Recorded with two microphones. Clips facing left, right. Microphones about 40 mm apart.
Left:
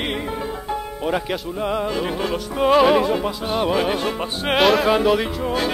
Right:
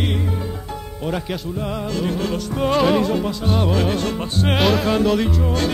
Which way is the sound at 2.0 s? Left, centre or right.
Centre.